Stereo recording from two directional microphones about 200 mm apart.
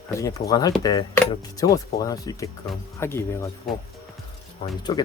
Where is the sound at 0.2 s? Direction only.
15° left (ahead or behind).